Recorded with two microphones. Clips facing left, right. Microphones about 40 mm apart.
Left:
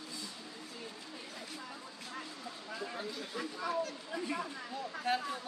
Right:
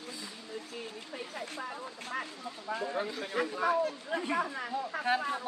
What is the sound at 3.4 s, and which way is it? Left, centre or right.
Speech, right.